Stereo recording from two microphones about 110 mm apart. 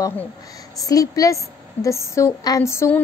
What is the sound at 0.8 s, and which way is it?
A woman's voice, 30° left (ahead or behind).